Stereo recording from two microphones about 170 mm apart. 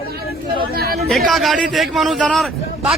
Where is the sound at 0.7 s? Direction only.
60° right (ahead or behind).